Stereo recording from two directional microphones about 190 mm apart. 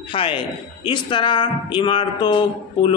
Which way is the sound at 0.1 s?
25° left (ahead or behind).